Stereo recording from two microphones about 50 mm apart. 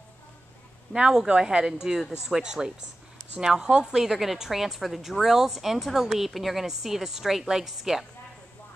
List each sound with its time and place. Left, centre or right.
1.1 s a woman's voice: centre